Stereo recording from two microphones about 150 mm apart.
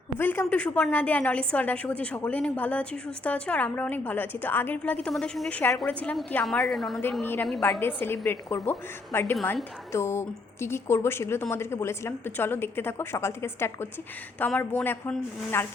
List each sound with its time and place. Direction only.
0.2 s a woman's voice: 10° left (ahead or behind)
7.6 s a woman's voice: 15° left (ahead or behind)